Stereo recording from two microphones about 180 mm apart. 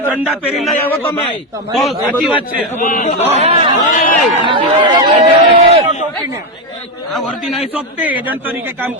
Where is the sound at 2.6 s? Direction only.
45° left (ahead or behind).